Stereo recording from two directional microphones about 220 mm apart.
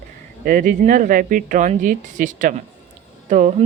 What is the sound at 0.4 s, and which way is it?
Speech, 40° right (ahead or behind).